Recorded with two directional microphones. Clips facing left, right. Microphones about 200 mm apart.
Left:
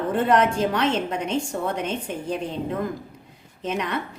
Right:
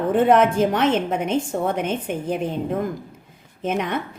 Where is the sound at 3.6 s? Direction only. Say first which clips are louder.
Right 3 dB; 50° right (ahead or behind).